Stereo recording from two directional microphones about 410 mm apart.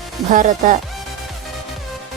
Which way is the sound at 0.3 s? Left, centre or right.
Centre.